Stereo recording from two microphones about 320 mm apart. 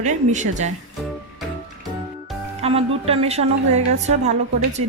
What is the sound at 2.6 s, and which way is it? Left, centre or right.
A woman's voice, centre.